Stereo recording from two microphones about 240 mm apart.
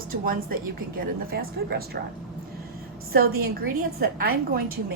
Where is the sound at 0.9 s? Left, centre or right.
Right.